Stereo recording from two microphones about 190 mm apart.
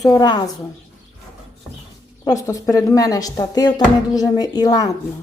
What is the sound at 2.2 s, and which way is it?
Speech, 20° left (ahead or behind).